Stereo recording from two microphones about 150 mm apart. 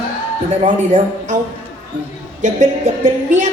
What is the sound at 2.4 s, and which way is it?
Speech, 55° right (ahead or behind).